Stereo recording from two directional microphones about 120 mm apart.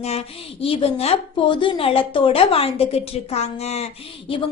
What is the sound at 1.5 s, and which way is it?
A woman's voice, 45° left (ahead or behind).